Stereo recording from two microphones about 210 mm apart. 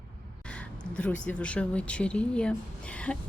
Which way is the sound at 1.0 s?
5° left (ahead or behind).